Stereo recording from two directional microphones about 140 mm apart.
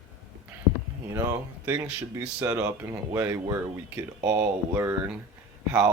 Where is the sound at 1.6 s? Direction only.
20° right (ahead or behind).